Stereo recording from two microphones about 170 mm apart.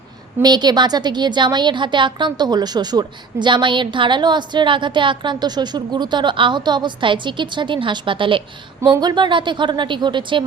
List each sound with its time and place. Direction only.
0.4 s a woman's voice: 25° right (ahead or behind)